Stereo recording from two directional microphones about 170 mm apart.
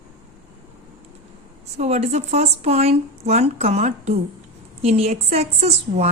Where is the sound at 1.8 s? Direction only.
40° right (ahead or behind).